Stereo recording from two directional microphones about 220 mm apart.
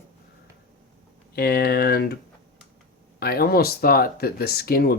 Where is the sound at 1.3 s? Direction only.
45° left (ahead or behind).